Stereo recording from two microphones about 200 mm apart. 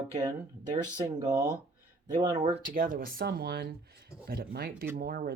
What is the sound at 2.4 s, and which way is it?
Speech, 40° right (ahead or behind).